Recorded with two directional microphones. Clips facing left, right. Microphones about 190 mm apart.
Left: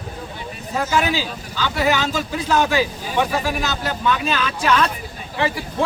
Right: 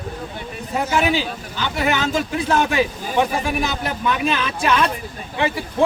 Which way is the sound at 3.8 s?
20° right (ahead or behind).